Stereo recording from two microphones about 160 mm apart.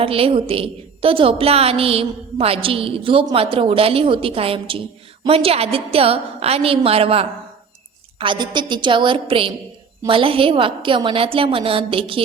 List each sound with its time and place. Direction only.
0.0 s a woman's voice: 35° right (ahead or behind)